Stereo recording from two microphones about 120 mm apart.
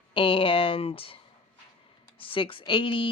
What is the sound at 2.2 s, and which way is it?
Speech, 45° left (ahead or behind).